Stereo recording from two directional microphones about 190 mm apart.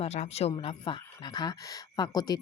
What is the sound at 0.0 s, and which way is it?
A woman's voice, 35° left (ahead or behind).